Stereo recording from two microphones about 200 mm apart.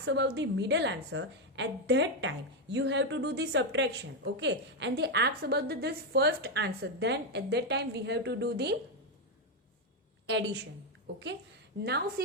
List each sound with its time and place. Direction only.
0.0 s a woman's voice: 60° right (ahead or behind)
10.2 s a woman's voice: 60° right (ahead or behind)
11.8 s a woman's voice: 50° right (ahead or behind)